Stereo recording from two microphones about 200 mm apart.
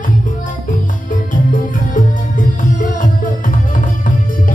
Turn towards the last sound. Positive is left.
turn(degrees=40)  # may be behind; listen again after turning